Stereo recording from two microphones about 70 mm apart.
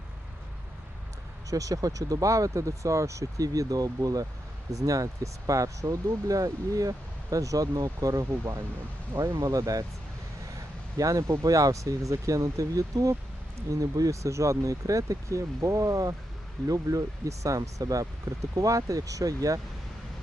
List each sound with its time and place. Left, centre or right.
1.5 s speech: right
8.2 s speech: right
9.4 s speech: right
10.9 s speech: right